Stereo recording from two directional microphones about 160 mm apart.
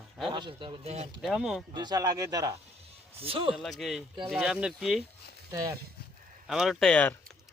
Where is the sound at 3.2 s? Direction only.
35° right (ahead or behind).